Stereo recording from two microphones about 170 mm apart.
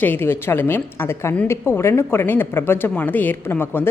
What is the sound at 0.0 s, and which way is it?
A woman's voice, 10° left (ahead or behind).